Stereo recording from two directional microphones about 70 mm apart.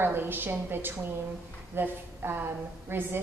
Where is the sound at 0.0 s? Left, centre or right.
Right.